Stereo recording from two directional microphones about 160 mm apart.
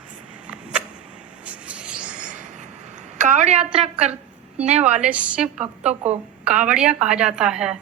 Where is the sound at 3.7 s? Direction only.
40° right (ahead or behind).